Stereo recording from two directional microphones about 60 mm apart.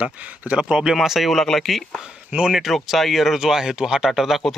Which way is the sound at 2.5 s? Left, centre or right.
Centre.